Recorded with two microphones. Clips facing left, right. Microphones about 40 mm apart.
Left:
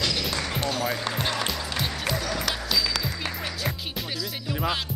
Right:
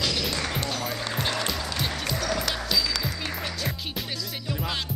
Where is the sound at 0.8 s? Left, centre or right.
Centre.